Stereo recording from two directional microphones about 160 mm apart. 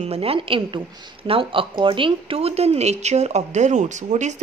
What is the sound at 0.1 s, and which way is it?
A woman's voice, 35° right (ahead or behind).